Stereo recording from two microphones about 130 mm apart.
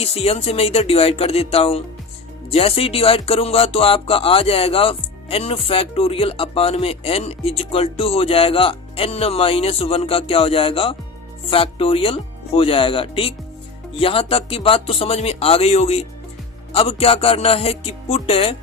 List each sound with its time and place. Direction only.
0.0 s speech: 50° left (ahead or behind)